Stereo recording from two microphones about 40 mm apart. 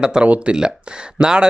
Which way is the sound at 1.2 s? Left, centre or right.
Centre.